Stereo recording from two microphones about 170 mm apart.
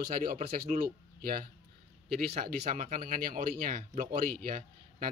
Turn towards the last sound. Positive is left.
turn(degrees=-55)  # may be behind; listen again after turning